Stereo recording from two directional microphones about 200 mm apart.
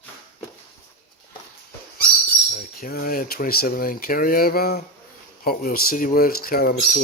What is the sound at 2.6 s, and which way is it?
Speech, 45° left (ahead or behind).